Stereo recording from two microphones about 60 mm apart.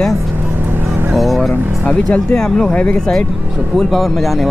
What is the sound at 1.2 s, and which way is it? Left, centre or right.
Speech, centre.